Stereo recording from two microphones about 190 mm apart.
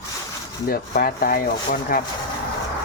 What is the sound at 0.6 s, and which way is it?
Speech, 50° left (ahead or behind).